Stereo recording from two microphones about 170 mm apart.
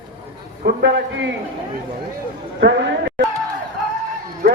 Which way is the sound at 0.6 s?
70° right (ahead or behind).